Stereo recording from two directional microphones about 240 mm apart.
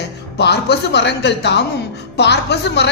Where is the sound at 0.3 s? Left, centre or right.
Left.